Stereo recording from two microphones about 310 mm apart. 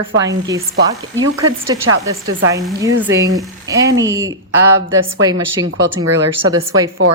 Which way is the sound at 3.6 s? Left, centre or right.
Centre.